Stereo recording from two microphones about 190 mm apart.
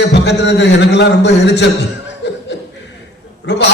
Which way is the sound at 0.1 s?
65° left (ahead or behind).